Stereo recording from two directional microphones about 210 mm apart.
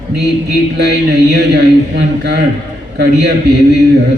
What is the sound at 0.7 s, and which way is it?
A man's voice, 50° right (ahead or behind).